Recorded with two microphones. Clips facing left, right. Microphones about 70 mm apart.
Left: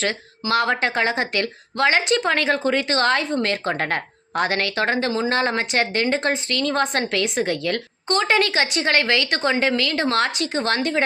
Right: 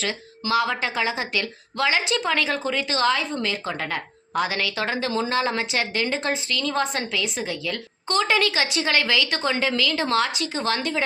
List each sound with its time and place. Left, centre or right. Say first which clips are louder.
0.4 s speech: left 1 dB; left
0.8 s a woman's voice: left 4 dB; left
8.3 s a woman's voice: left 2 dB; left